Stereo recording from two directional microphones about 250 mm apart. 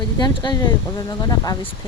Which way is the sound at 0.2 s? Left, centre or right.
Centre.